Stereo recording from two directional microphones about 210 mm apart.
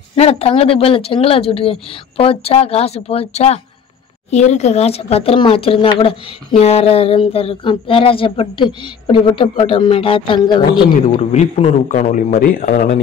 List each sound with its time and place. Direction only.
0.1 s a man's voice: 30° left (ahead or behind)